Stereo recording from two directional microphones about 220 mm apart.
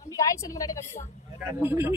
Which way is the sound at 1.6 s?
10° right (ahead or behind).